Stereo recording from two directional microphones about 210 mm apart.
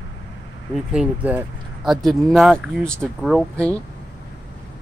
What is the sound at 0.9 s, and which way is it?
Speech, 5° right (ahead or behind).